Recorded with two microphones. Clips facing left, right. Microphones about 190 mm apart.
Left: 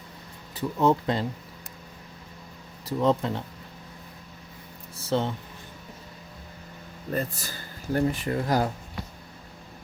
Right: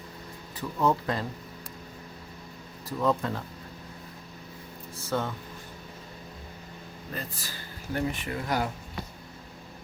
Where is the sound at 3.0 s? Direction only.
25° left (ahead or behind).